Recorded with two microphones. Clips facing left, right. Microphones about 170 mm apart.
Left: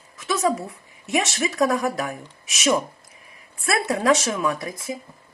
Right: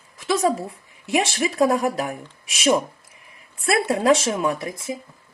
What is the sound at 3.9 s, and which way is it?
Speech, 30° right (ahead or behind).